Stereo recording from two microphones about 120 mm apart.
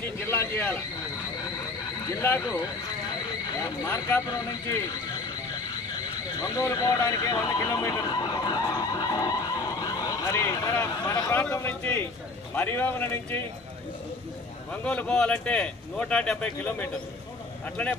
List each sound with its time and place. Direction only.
0.3 s speech: 20° left (ahead or behind)
2.1 s a man's voice: 25° left (ahead or behind)
3.8 s a man's voice: 30° left (ahead or behind)
6.4 s speech: 30° left (ahead or behind)
14.7 s speech: 10° left (ahead or behind)